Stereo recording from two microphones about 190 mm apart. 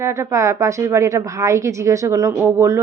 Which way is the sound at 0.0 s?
15° right (ahead or behind).